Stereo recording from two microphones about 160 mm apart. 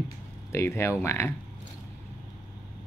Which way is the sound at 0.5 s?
15° left (ahead or behind).